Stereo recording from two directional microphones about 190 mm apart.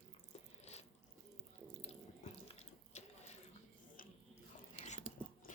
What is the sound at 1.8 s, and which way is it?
Sink, 35° left (ahead or behind).